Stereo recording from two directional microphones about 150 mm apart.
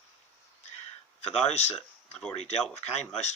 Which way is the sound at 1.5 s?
45° left (ahead or behind).